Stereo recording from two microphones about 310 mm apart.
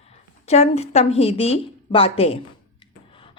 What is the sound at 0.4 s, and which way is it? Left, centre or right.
Speech, left.